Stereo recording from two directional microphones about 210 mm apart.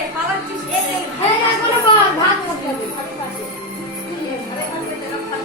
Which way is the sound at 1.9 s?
25° left (ahead or behind).